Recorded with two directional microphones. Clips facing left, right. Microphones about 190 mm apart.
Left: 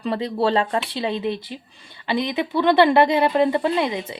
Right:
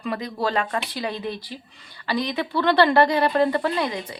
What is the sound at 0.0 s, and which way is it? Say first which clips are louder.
Speech: left 5 dB; 30° left (ahead or behind).